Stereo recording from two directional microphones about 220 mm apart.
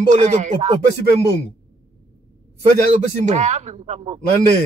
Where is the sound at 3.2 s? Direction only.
30° right (ahead or behind).